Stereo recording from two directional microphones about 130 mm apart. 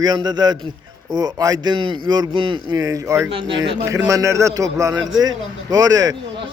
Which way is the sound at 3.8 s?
25° right (ahead or behind).